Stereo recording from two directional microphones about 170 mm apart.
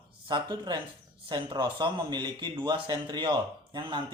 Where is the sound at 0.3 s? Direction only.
25° right (ahead or behind).